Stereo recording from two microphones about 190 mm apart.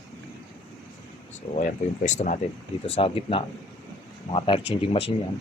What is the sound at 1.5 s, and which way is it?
Speech, 40° left (ahead or behind).